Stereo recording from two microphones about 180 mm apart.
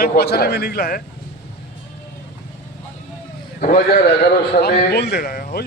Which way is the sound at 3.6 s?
50° left (ahead or behind).